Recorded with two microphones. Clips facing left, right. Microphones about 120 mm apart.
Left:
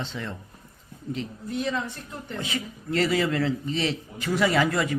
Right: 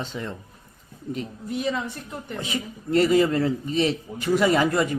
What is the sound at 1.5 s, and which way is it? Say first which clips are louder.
Speech: right 2 dB; 10° right (ahead or behind).